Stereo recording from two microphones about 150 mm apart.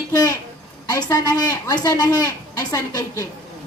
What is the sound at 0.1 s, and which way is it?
A woman's voice, 25° left (ahead or behind).